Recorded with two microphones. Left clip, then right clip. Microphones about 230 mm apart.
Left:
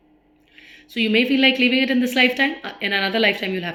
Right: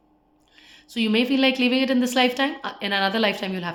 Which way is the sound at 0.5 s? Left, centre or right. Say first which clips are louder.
Left 3 dB; centre.